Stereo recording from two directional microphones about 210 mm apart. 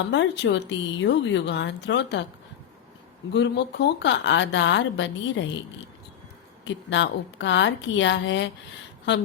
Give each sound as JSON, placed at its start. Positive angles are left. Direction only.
{"t": 0.1, "sound": "speech", "side_deg": 60}
{"t": 3.3, "sound": "speech", "side_deg": 55}
{"t": 6.7, "sound": "speech", "side_deg": 60}